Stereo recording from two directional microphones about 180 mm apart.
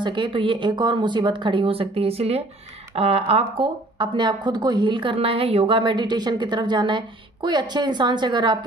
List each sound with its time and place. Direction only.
0.0 s speech: 25° right (ahead or behind)